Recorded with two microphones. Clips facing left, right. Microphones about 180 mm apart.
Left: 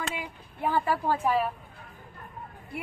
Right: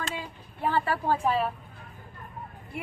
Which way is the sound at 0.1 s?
15° left (ahead or behind).